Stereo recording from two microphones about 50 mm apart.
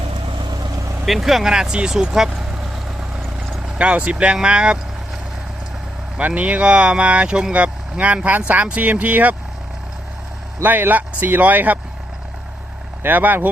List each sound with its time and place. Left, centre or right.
1.0 s speech: centre
3.8 s speech: right
6.1 s speech: right
10.6 s speech: right
13.0 s speech: right